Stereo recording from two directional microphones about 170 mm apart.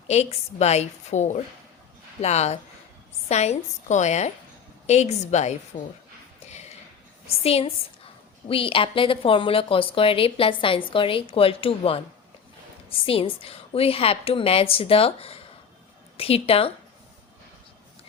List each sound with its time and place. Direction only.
0.1 s a woman's voice: 40° left (ahead or behind)
6.5 s a sound: 40° left (ahead or behind)
7.4 s a woman's voice: 35° left (ahead or behind)
13.1 s a woman's voice: 35° left (ahead or behind)